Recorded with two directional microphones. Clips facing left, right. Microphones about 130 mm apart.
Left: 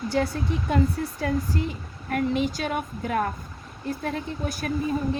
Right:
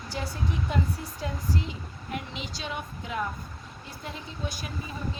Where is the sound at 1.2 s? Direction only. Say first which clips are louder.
Left 6 dB; 55° left (ahead or behind).